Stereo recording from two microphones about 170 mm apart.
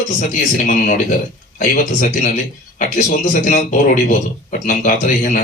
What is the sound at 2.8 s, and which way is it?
Speech, 50° left (ahead or behind).